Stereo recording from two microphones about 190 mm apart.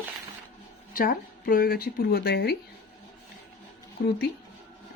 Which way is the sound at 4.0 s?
50° left (ahead or behind).